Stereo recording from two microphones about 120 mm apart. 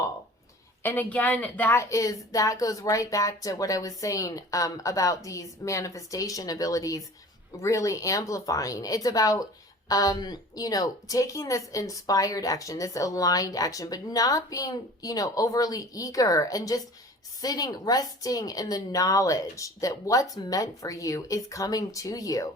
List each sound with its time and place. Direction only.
0.8 s a woman's voice: 15° left (ahead or behind)